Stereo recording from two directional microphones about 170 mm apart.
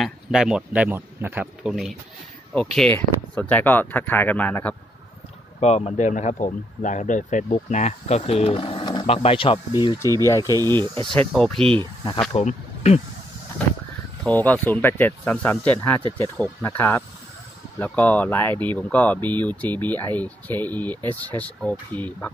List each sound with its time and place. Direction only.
0.0 s speech: 5° right (ahead or behind)
5.6 s speech: 40° left (ahead or behind)
10.1 s speech: 20° left (ahead or behind)
10.4 s speech: 20° right (ahead or behind)
11.1 s speech: 5° left (ahead or behind)
12.0 s speech: 25° left (ahead or behind)
12.4 s speech: 40° left (ahead or behind)
14.2 s speech: 10° left (ahead or behind)